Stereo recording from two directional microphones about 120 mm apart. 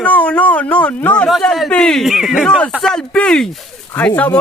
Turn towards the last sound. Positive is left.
turn(degrees=15)  # may be behind; listen again after turning